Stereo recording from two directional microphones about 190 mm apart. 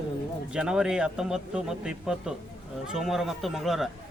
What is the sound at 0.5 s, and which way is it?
A man's voice, 5° right (ahead or behind).